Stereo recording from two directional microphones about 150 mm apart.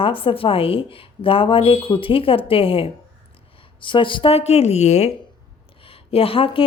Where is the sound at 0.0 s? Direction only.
35° left (ahead or behind).